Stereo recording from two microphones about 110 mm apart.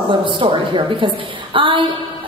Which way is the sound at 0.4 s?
50° right (ahead or behind).